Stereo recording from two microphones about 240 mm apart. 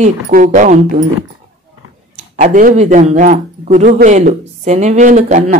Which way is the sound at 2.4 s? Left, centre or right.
Right.